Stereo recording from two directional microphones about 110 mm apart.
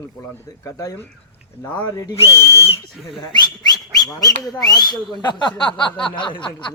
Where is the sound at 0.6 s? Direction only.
30° left (ahead or behind).